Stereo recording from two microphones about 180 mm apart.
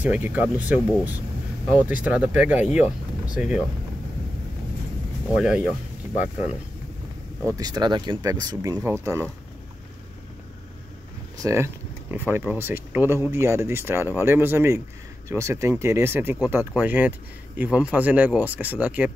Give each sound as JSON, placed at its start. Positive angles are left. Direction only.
{"t": 0.0, "sound": "speech", "side_deg": -10}
{"t": 5.3, "sound": "speech", "side_deg": -5}
{"t": 7.5, "sound": "speech", "side_deg": -20}
{"t": 11.3, "sound": "speech", "side_deg": -15}